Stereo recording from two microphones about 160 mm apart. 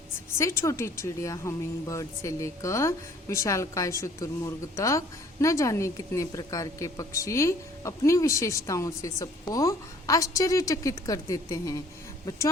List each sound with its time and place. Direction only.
0.3 s speech: 15° left (ahead or behind)